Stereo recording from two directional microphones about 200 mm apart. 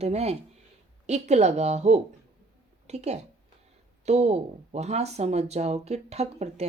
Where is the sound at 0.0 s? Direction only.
30° right (ahead or behind).